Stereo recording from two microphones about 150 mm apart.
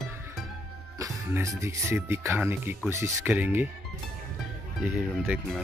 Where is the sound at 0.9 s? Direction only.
20° right (ahead or behind).